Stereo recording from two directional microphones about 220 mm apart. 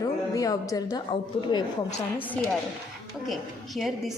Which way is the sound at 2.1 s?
5° left (ahead or behind).